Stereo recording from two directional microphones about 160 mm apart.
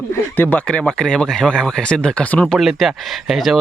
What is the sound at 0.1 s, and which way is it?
Speech, 10° left (ahead or behind).